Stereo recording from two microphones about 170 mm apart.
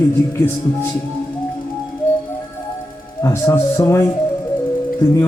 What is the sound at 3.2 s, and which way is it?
Speech, 15° left (ahead or behind).